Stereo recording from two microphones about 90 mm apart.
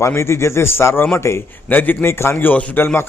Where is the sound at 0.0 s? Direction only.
30° left (ahead or behind).